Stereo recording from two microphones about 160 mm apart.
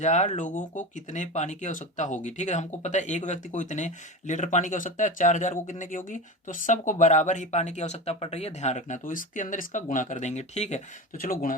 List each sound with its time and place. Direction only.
0.0 s speech: 45° left (ahead or behind)
11.2 s speech: 60° left (ahead or behind)